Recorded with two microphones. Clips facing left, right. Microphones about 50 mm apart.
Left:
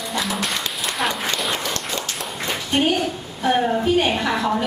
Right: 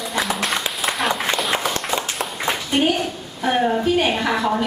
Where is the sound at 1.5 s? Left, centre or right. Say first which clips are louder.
Right 3 dB; centre.